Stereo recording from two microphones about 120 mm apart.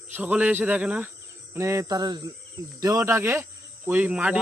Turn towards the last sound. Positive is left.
turn(degrees=-10)  # may be behind; listen again after turning